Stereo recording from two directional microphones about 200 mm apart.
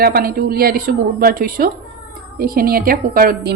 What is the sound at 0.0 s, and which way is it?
A woman's voice, 50° right (ahead or behind).